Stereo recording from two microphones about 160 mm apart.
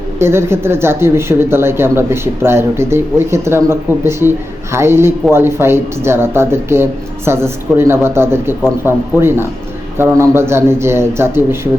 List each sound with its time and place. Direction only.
0.2 s speech: 15° right (ahead or behind)